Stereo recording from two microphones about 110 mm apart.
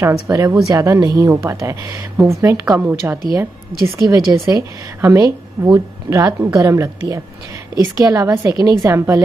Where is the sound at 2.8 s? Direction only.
15° right (ahead or behind).